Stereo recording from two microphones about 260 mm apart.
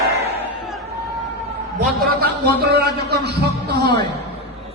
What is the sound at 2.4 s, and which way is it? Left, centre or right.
A man's voice, right.